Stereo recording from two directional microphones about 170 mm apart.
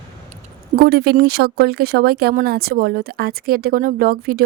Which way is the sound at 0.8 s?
65° right (ahead or behind).